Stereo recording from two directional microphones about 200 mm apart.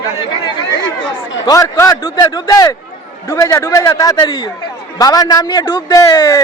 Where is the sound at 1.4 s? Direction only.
15° left (ahead or behind).